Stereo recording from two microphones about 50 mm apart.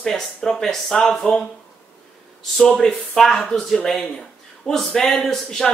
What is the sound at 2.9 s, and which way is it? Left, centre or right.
Speech, centre.